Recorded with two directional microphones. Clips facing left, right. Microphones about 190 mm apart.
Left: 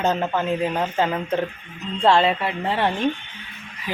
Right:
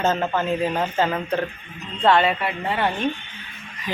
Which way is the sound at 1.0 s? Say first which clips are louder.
Left 1 dB; 15° left (ahead or behind).